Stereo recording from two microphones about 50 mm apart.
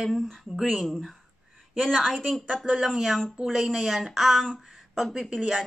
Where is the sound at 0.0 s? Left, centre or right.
Centre.